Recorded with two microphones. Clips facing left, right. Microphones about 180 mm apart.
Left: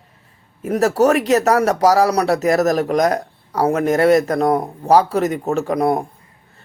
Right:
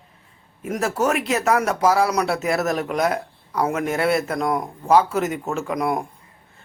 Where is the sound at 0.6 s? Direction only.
35° left (ahead or behind).